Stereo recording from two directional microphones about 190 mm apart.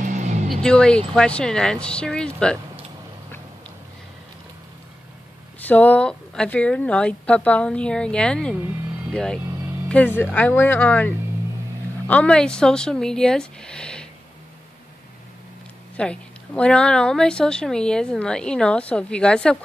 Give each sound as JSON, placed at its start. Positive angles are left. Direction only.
{"t": 0.0, "sound": "music", "side_deg": -40}
{"t": 0.5, "sound": "a woman's voice", "side_deg": 5}
{"t": 5.6, "sound": "a woman's voice", "side_deg": 10}
{"t": 16.0, "sound": "a woman's voice", "side_deg": 5}